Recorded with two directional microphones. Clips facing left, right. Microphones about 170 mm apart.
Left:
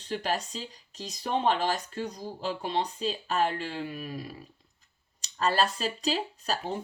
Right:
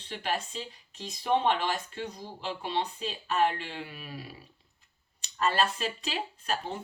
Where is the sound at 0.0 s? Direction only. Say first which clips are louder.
Left 3 dB; 40° left (ahead or behind).